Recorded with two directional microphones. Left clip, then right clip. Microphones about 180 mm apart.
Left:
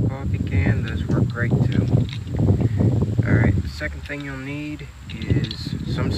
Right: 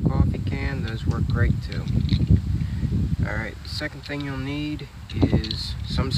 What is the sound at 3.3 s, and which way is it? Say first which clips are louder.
Speech: left 9 dB; 15° right (ahead or behind).